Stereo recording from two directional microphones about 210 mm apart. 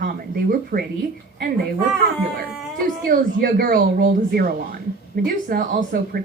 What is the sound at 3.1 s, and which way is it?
Speech, 45° right (ahead or behind).